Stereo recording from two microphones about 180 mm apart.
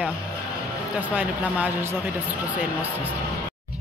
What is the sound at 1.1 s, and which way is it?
Speech, 10° right (ahead or behind).